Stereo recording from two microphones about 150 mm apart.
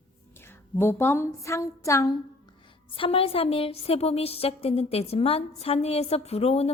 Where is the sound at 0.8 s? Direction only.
15° left (ahead or behind).